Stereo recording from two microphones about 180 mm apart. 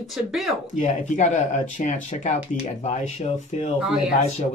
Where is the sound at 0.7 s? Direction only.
45° left (ahead or behind).